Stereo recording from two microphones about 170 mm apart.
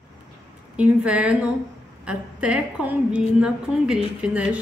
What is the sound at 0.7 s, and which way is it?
A woman's voice, 5° right (ahead or behind).